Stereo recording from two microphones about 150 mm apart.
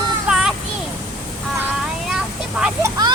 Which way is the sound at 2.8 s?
25° right (ahead or behind).